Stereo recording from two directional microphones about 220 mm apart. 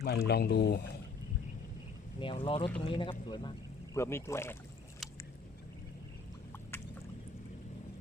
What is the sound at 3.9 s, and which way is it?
Speech, 10° left (ahead or behind).